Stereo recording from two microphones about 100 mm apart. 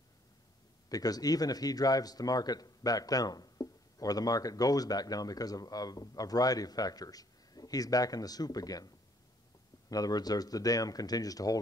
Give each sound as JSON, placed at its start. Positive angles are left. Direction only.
{"t": 0.8, "sound": "speech", "side_deg": 40}